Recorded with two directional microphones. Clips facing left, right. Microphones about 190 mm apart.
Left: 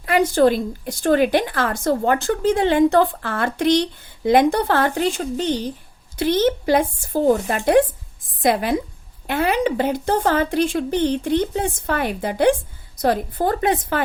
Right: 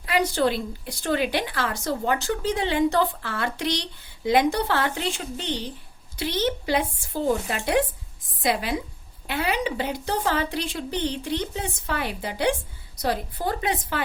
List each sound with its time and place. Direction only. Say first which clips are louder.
0.0 s a woman's voice: left 7 dB; 50° left (ahead or behind)